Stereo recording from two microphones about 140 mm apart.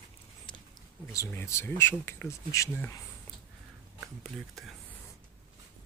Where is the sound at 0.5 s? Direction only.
35° left (ahead or behind).